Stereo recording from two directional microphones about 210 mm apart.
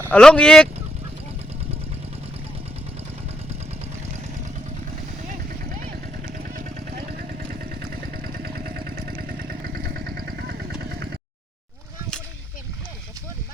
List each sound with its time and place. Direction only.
0.1 s speech: 5° left (ahead or behind)
6.7 s vehicle: 45° right (ahead or behind)